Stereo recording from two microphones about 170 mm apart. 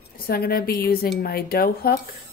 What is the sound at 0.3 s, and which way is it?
Speech, 65° left (ahead or behind).